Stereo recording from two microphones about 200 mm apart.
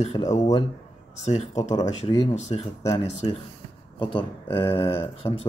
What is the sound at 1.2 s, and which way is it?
Speech, 35° left (ahead or behind).